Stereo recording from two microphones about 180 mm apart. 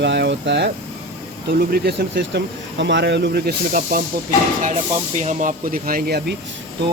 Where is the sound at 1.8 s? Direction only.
80° right; by 4.0 s 55° right (ahead or behind).